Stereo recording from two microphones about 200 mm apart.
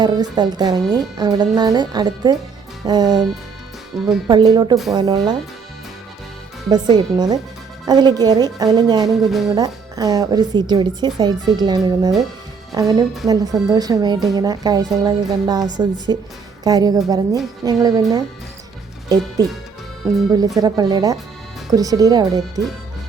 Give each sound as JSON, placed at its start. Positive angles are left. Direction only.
{"t": 0.0, "sound": "speech", "side_deg": -20}
{"t": 3.9, "sound": "music", "side_deg": 0}
{"t": 4.3, "sound": "speech", "side_deg": -20}
{"t": 6.7, "sound": "speech", "side_deg": -20}
{"t": 9.0, "sound": "music", "side_deg": 0}
{"t": 9.6, "sound": "speech", "side_deg": -20}